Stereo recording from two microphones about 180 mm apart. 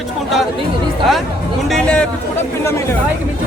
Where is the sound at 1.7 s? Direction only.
5° left (ahead or behind).